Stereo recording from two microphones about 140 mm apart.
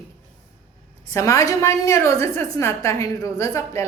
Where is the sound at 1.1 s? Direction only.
25° left (ahead or behind).